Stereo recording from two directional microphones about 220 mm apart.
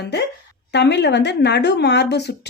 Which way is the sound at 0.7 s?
50° left (ahead or behind).